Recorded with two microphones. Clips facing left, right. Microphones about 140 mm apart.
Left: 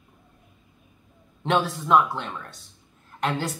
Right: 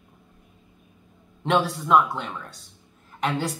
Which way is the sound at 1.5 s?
Centre (ahead or behind).